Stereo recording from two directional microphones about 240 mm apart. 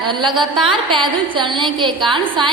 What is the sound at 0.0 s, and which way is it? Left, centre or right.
A woman's voice, centre.